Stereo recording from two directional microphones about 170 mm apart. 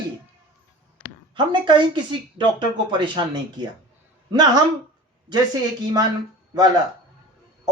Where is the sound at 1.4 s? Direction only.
25° right (ahead or behind).